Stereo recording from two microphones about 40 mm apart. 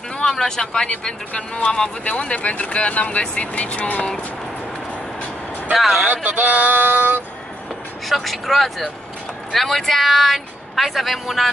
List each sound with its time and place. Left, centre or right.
0.2 s speech: centre
0.8 s speech: left
5.7 s speech: centre
6.0 s speech: right
8.1 s speech: centre